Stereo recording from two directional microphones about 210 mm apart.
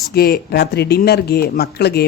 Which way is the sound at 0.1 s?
45° left (ahead or behind).